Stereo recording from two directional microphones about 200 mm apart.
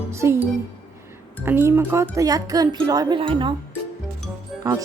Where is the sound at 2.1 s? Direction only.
15° right (ahead or behind).